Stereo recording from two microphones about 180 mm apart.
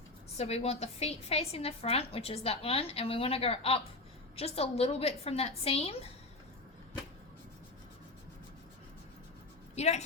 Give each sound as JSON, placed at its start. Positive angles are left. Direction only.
{"t": 0.3, "sound": "a woman's voice", "side_deg": 35}
{"t": 9.7, "sound": "a woman's voice", "side_deg": 40}